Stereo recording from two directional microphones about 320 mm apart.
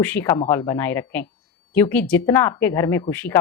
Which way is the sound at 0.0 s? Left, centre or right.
Centre.